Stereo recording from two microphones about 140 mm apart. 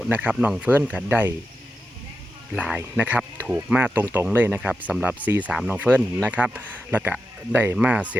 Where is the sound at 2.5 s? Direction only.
10° right (ahead or behind).